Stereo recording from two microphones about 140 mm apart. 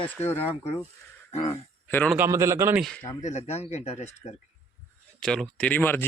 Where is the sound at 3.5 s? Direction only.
50° left (ahead or behind).